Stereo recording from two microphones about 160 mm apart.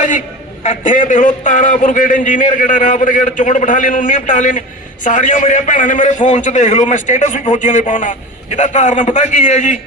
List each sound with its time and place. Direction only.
0.6 s a man's voice: 50° left (ahead or behind)